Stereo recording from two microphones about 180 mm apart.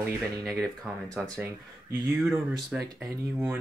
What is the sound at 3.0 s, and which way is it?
Speech, 15° right (ahead or behind).